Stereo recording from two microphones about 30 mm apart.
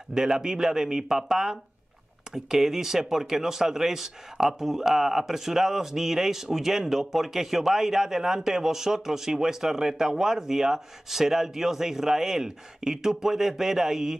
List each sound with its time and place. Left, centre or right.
0.1 s speech: centre